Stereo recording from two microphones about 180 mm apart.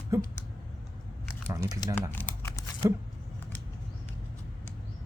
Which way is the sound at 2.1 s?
10° left (ahead or behind).